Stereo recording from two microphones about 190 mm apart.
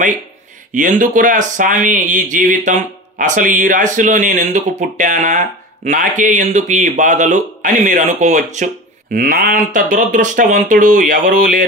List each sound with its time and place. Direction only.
0.7 s a man's voice: 45° right (ahead or behind)